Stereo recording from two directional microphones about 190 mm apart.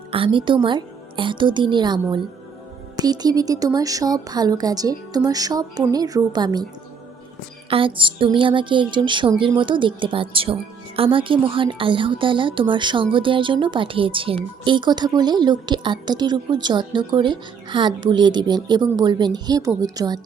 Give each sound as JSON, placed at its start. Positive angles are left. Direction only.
{"t": 0.1, "sound": "speech", "side_deg": -25}
{"t": 7.7, "sound": "speech", "side_deg": -25}